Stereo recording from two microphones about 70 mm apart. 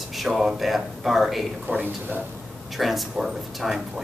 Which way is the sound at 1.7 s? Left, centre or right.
Right.